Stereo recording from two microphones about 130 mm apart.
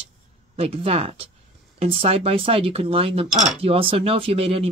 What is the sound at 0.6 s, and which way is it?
Speech, 50° right (ahead or behind).